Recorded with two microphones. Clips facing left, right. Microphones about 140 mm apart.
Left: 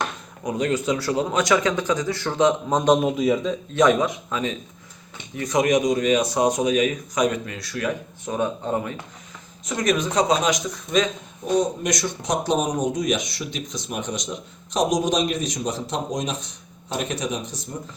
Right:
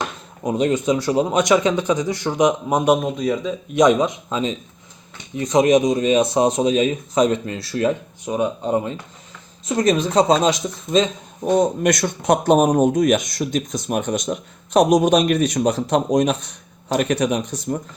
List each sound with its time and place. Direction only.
0.4 s speech: 20° right (ahead or behind)
3.0 s a man's voice: 5° left (ahead or behind)
3.7 s speech: 20° right (ahead or behind)
8.2 s speech: 15° right (ahead or behind)
9.6 s speech: 30° right (ahead or behind)
11.5 s speech: 55° right (ahead or behind)